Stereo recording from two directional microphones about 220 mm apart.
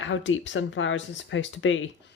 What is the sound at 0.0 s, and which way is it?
Speech, 60° left (ahead or behind).